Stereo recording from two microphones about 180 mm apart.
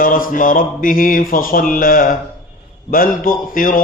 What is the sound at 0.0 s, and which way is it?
A man's voice, 50° left (ahead or behind).